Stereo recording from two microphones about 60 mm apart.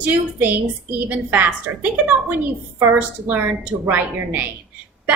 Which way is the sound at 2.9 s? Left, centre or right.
Right.